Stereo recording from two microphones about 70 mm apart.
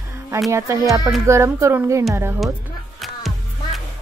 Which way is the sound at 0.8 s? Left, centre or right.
Right.